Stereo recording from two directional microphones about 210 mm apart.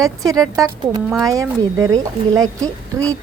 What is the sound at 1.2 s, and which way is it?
Speech, 15° right (ahead or behind).